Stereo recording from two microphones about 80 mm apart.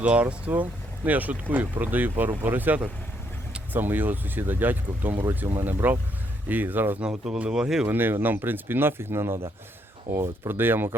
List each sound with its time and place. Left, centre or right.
0.0 s speech: centre
7.9 s speech: right
10.5 s speech: right